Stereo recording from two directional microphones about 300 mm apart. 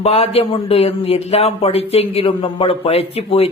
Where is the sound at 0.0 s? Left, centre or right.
Centre.